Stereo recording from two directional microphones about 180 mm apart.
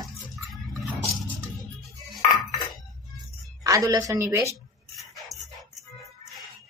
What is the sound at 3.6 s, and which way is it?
Speech, 20° right (ahead or behind).